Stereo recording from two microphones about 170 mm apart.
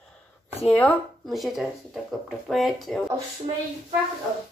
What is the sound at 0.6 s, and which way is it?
Speech, 10° left (ahead or behind).